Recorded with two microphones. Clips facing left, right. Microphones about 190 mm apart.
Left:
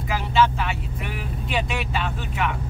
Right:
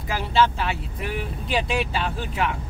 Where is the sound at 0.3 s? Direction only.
35° right (ahead or behind).